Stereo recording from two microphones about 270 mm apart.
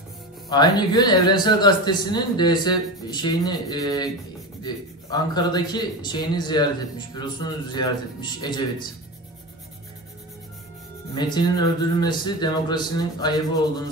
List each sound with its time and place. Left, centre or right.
0.5 s a man's voice: centre
5.1 s a man's voice: centre
11.1 s a man's voice: centre